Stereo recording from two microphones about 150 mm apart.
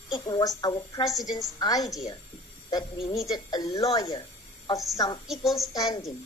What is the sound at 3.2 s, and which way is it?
A woman's voice, 25° left (ahead or behind).